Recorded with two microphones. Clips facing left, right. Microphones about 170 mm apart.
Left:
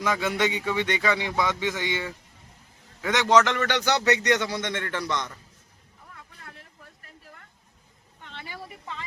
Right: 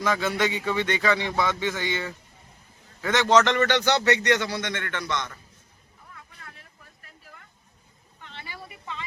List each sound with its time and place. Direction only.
0.0 s a man's voice: 15° left (ahead or behind); by 5.3 s 35° left (ahead or behind)
8.2 s vehicle: 55° left (ahead or behind)